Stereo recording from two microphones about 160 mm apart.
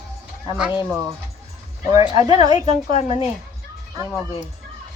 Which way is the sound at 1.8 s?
35° left (ahead or behind).